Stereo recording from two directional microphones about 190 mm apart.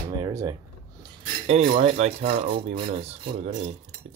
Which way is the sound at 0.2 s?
20° right (ahead or behind).